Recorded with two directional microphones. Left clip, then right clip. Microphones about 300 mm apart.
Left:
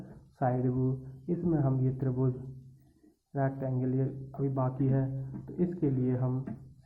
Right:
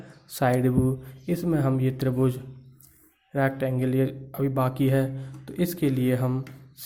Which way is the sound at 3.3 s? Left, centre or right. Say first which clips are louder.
Right 8 dB; right.